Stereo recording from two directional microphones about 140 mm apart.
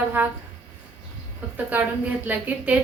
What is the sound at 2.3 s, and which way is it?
Speech, 10° right (ahead or behind).